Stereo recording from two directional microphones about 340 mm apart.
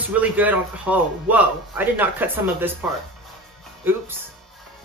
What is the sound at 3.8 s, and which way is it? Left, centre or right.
Speech, centre.